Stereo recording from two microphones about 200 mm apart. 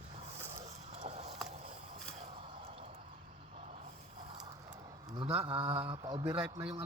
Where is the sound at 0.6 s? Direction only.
30° right (ahead or behind).